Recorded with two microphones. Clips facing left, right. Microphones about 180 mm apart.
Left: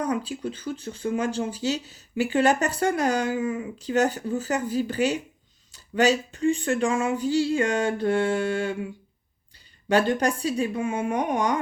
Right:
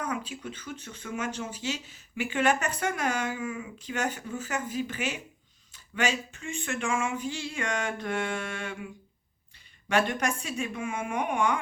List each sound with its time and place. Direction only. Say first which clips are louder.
0.0 s speech: left 7 dB; 35° left (ahead or behind)
9.9 s speech: left 5 dB; 30° left (ahead or behind)